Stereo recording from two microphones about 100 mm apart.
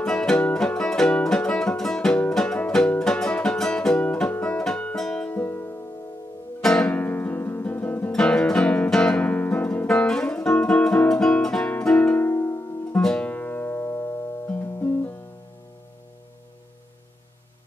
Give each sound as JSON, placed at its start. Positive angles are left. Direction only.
{"t": 0.0, "sound": "music", "side_deg": 5}
{"t": 5.3, "sound": "music", "side_deg": 20}
{"t": 6.6, "sound": "music", "side_deg": 5}
{"t": 6.9, "sound": "music", "side_deg": 20}
{"t": 12.9, "sound": "music", "side_deg": 10}